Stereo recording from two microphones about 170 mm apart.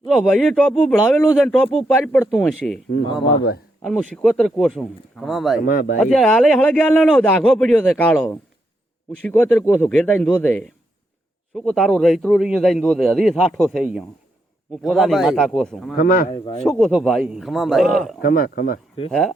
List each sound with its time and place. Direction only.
0.0 s a man's voice: centre (ahead or behind)
2.9 s a man's voice: 85° left
4.1 s a man's voice: centre (ahead or behind)
5.6 s speech: 60° left (ahead or behind)
6.0 s a man's voice: centre (ahead or behind)
16.0 s speech: 60° left (ahead or behind)
16.3 s speech: 30° left (ahead or behind)
16.6 s a man's voice: centre (ahead or behind)
18.2 s speech: 60° left (ahead or behind)